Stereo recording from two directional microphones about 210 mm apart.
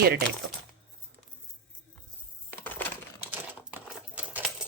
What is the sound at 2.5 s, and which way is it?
Coin, 10° left (ahead or behind).